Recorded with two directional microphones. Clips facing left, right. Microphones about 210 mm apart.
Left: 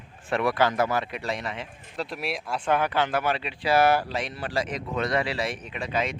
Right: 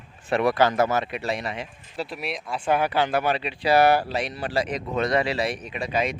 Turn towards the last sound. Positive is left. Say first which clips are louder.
# right 3 dB
turn(degrees=-15)  # may be behind; listen again after turning